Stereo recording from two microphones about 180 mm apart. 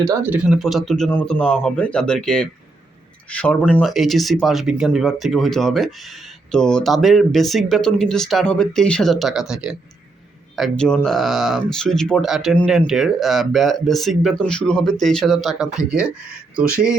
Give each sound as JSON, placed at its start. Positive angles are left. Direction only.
{"t": 0.0, "sound": "speech", "side_deg": -15}